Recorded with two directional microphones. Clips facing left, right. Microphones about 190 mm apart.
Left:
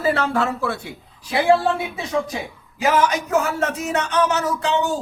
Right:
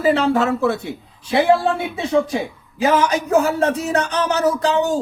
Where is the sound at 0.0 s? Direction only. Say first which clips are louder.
Right 4 dB; 15° right (ahead or behind).